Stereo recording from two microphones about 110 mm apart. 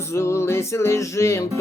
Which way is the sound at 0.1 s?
25° left (ahead or behind).